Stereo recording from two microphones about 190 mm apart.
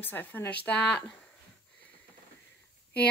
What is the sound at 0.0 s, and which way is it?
A woman's voice, 10° left (ahead or behind).